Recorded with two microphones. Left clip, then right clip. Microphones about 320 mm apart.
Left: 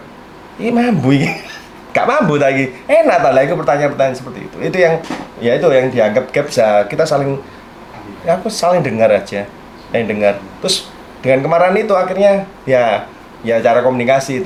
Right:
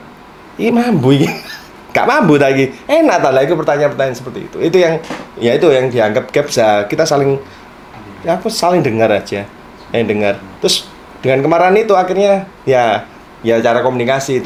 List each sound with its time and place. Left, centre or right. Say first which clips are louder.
0.6 s speech: right 2 dB; right
5.4 s speech: right 1 dB; right
8.3 s speech: even; right